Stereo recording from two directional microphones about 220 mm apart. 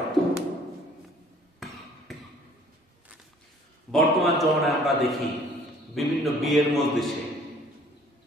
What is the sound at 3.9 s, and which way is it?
A man's voice, centre (ahead or behind).